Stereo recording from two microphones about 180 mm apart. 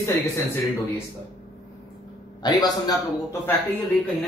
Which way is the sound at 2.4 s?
20° left (ahead or behind).